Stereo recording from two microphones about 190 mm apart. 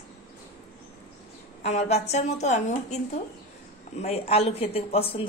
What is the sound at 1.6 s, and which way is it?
A woman's voice, 35° left (ahead or behind).